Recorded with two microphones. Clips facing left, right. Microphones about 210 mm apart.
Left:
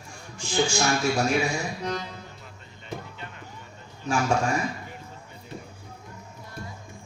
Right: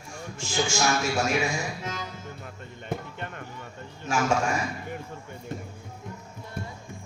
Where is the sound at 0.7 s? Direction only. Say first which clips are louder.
Left 1 dB; 35° left (ahead or behind).